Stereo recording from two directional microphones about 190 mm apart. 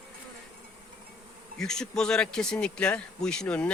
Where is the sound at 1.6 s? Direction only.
5° left (ahead or behind).